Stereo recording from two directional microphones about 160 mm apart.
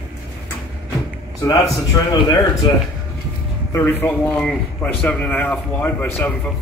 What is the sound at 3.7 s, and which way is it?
A man's voice, 15° left (ahead or behind).